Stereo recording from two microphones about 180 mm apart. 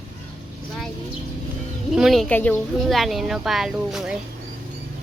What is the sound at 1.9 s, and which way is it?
Speech, centre (ahead or behind).